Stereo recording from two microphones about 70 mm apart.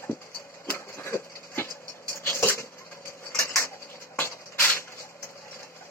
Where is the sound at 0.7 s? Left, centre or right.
Left.